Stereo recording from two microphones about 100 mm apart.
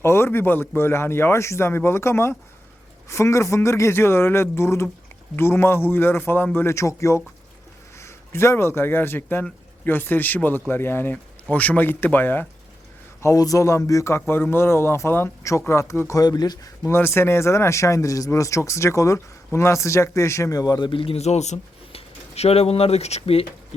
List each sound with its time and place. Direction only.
0.0 s a man's voice: 25° left (ahead or behind)
13.2 s a man's voice: 35° left (ahead or behind)
14.2 s a man's voice: 20° left (ahead or behind); by 16.6 s 40° left (ahead or behind)
16.8 s a man's voice: 25° left (ahead or behind); by 23.5 s 75° left (ahead or behind)